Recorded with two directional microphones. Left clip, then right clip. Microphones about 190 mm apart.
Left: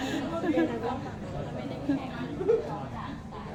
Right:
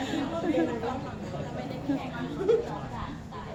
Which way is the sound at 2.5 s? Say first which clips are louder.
Right 1 dB; 25° right (ahead or behind).